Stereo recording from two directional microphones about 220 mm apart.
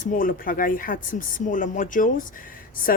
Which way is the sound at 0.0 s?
40° left (ahead or behind).